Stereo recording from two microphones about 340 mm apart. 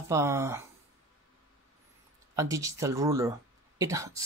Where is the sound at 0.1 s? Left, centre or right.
Centre.